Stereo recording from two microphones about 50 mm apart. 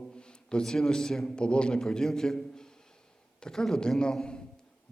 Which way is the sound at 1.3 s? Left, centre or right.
Centre.